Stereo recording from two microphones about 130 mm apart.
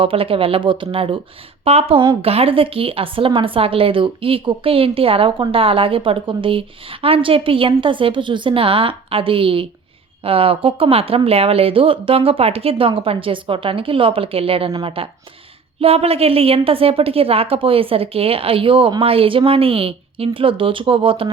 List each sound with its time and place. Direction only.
0.0 s a woman's voice: 45° right (ahead or behind)